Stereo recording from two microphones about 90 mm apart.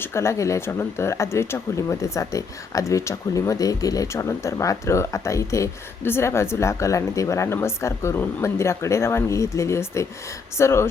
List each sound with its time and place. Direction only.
0.0 s a woman's voice: 30° left (ahead or behind)